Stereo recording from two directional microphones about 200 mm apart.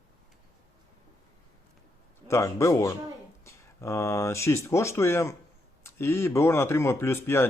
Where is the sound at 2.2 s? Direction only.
15° left (ahead or behind).